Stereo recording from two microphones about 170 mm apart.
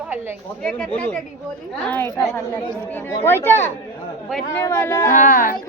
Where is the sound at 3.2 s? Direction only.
15° left (ahead or behind).